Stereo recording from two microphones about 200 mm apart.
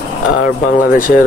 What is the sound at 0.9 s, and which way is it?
Speech, 45° left (ahead or behind).